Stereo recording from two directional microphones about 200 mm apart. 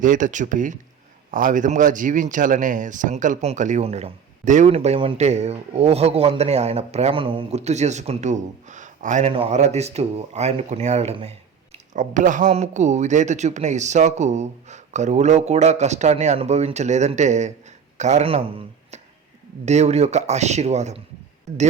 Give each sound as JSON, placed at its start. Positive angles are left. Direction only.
{"t": 0.0, "sound": "speech", "side_deg": -40}